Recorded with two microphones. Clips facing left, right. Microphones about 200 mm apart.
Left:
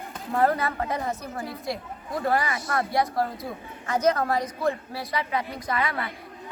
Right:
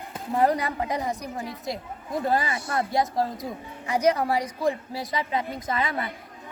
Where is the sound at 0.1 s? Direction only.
15° right (ahead or behind).